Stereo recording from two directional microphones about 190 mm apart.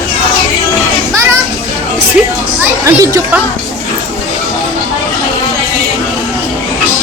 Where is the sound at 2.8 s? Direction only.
15° right (ahead or behind).